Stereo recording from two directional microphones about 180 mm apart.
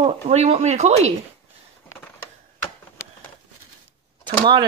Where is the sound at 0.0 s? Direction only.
35° right (ahead or behind).